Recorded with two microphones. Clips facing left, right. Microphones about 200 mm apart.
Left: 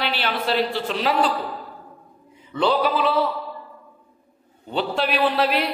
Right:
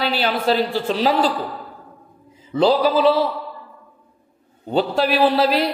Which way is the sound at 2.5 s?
40° right (ahead or behind).